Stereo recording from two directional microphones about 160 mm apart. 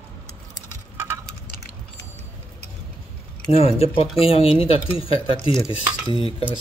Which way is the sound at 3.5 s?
40° left (ahead or behind).